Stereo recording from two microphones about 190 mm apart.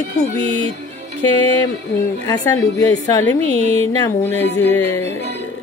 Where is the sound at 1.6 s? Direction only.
15° left (ahead or behind).